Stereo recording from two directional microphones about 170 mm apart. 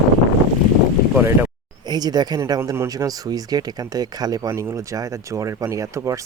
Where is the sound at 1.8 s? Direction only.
25° right (ahead or behind).